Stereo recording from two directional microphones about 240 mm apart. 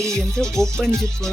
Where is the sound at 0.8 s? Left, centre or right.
Centre.